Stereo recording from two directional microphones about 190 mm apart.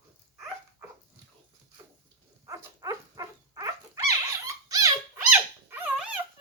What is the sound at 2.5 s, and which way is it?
Dog, 15° right (ahead or behind).